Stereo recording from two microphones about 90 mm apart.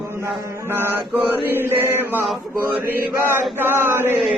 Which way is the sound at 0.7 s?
25° right (ahead or behind).